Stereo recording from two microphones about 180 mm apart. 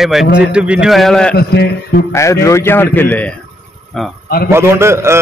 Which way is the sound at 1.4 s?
60° left (ahead or behind).